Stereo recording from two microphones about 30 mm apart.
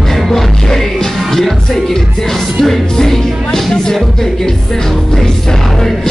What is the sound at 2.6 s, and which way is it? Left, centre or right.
Music, centre.